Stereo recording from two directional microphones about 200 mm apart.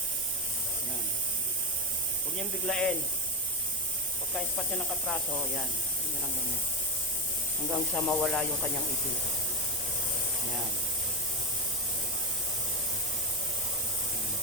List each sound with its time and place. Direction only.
2.6 s speech: centre (ahead or behind)
5.0 s speech: centre (ahead or behind)
7.7 s speech: 5° left (ahead or behind)